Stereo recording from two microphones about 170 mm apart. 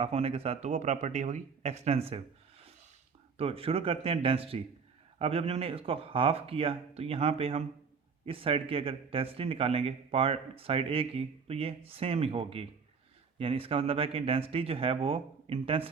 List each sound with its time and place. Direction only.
0.0 s speech: 35° right (ahead or behind)
3.3 s speech: 35° right (ahead or behind)